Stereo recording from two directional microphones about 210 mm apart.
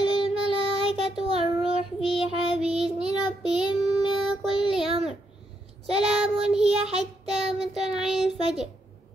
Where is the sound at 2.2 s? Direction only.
30° right (ahead or behind).